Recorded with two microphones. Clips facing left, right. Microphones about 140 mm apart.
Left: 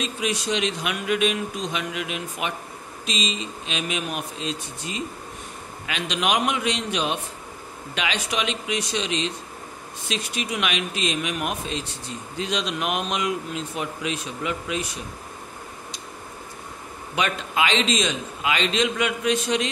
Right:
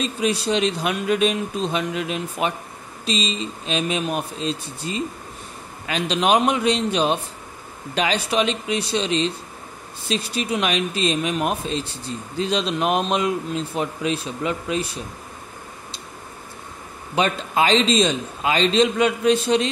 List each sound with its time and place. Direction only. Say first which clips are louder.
0.0 s a man's voice: right 4 dB; 35° right (ahead or behind)
17.1 s a man's voice: right 4 dB; 35° right (ahead or behind)